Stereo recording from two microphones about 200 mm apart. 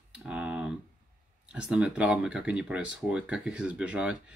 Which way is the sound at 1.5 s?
5° right (ahead or behind).